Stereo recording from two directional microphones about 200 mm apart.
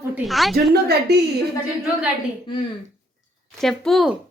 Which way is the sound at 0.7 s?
55° right (ahead or behind).